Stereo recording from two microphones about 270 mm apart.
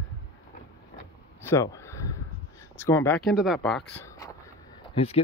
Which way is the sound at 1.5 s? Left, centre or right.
Centre.